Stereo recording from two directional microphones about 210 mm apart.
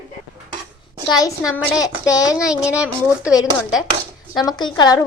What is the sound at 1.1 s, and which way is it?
Speech, 15° left (ahead or behind).